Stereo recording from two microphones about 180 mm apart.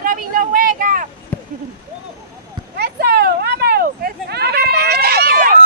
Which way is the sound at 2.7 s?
65° right (ahead or behind).